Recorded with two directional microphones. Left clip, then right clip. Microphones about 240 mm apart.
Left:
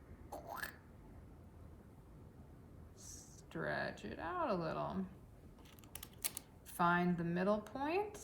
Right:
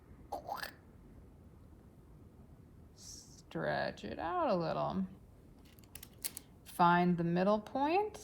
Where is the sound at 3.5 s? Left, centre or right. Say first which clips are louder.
Right 5 dB; centre.